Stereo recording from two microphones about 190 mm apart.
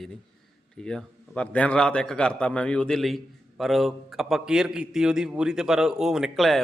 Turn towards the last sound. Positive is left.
turn(degrees=0)  # may be behind; listen again after turning